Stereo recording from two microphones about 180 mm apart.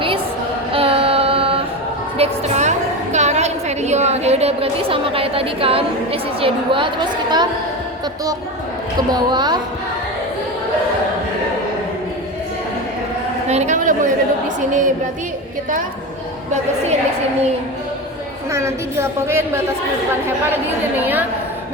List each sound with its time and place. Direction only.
0.7 s child singing: 30° right (ahead or behind)
2.1 s a woman's voice: 35° right (ahead or behind)
9.1 s a woman's voice: 25° right (ahead or behind)
13.5 s a woman's voice: 40° right (ahead or behind)
18.5 s a woman's voice: 15° right (ahead or behind)